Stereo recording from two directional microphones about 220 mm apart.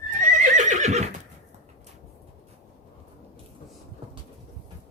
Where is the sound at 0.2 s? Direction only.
35° right (ahead or behind).